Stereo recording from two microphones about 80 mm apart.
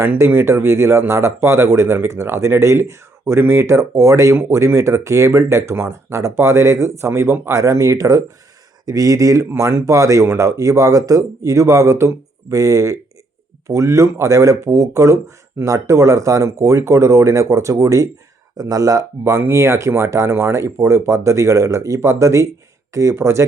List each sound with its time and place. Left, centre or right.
0.0 s speech: right